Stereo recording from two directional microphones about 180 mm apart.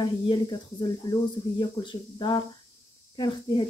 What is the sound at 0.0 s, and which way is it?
Speech, 25° left (ahead or behind).